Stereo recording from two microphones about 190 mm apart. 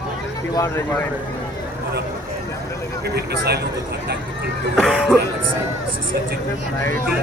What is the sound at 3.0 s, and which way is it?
Speech, 60° right (ahead or behind).